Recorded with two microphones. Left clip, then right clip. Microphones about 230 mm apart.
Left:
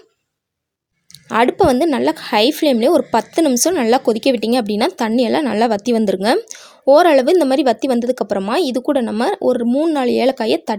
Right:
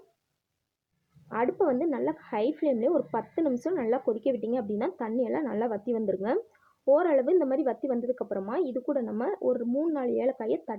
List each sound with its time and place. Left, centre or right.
1.3 s speech: left